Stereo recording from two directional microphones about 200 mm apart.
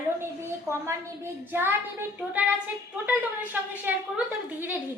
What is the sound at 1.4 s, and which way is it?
A woman's voice, 10° right (ahead or behind).